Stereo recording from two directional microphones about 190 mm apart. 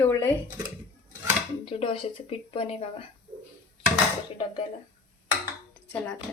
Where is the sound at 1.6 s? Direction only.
30° left (ahead or behind).